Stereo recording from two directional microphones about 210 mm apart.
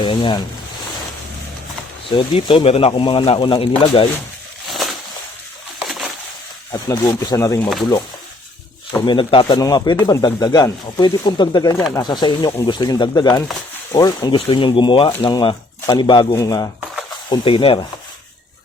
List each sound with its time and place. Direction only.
0.0 s speech: 25° left (ahead or behind)
2.0 s speech: 25° left (ahead or behind)
4.7 s a sound: centre (ahead or behind)
6.7 s speech: 15° left (ahead or behind)
9.0 s speech: 20° left (ahead or behind)